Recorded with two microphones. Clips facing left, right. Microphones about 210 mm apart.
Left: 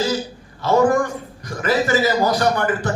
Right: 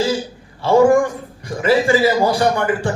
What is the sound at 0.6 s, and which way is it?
A man's voice, 30° right (ahead or behind).